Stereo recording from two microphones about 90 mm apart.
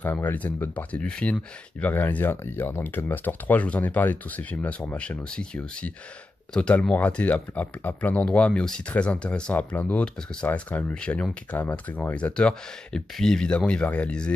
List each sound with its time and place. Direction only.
0.0 s speech: 20° left (ahead or behind)